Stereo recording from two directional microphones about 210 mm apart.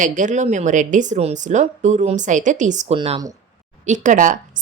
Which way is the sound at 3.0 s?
20° right (ahead or behind).